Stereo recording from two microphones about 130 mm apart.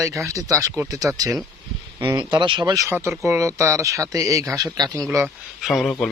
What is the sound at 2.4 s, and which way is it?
Speech, 35° right (ahead or behind).